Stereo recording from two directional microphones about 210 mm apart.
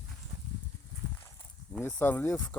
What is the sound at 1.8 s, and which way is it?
Speech, 10° left (ahead or behind).